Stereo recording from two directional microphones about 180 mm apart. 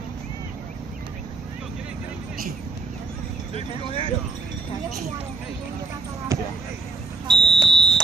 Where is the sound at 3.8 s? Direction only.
40° left (ahead or behind).